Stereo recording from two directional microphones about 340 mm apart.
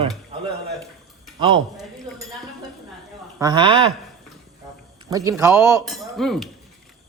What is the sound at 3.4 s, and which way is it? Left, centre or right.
Speech, centre.